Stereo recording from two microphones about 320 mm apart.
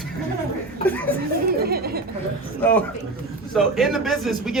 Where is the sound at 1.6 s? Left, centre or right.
Right.